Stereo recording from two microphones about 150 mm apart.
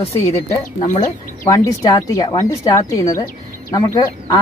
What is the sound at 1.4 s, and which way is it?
Speech, 20° left (ahead or behind).